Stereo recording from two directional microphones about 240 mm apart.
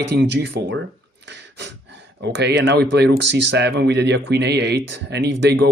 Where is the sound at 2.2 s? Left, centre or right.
Right.